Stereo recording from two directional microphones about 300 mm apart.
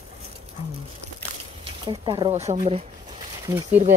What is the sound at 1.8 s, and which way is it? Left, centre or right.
Speech, centre.